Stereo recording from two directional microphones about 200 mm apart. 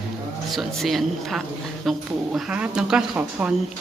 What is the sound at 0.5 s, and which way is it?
A woman's voice, centre (ahead or behind).